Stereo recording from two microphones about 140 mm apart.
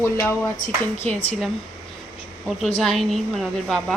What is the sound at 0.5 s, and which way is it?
Speech, 60° left (ahead or behind).